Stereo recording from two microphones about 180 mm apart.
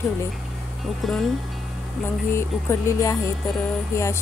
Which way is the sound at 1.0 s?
Centre (ahead or behind).